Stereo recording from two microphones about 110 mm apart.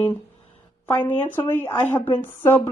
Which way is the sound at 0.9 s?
20° left (ahead or behind).